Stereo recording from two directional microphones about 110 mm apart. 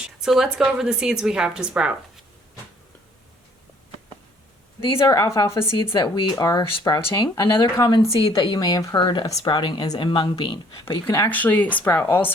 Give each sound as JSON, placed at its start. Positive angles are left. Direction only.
{"t": 0.0, "sound": "a woman's voice", "side_deg": -5}
{"t": 4.9, "sound": "a woman's voice", "side_deg": 35}
{"t": 5.7, "sound": "a woman's voice", "side_deg": 45}
{"t": 11.3, "sound": "speech", "side_deg": 15}